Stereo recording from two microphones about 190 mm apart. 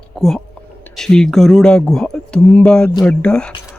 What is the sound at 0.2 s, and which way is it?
A man's voice, centre (ahead or behind).